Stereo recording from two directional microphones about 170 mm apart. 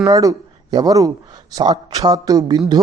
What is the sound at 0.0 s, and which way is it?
Speech, 20° right (ahead or behind).